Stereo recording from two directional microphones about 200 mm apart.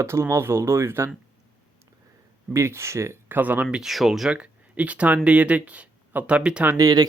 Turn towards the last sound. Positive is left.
turn(degrees=-20)  # may be behind; listen again after turning